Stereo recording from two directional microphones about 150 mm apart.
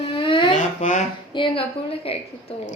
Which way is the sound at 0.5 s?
55° left (ahead or behind).